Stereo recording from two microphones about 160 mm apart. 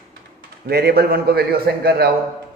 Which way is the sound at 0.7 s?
75° right (ahead or behind).